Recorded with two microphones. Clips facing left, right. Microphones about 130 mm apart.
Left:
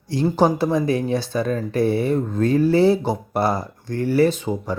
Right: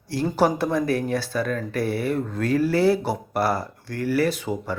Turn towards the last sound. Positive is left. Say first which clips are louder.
# left 5 dB
turn(degrees=20)  # may be behind; listen again after turning